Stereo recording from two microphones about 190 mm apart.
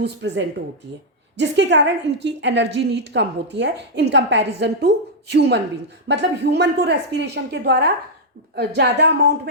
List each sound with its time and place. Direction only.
0.0 s a woman's voice: 65° right (ahead or behind)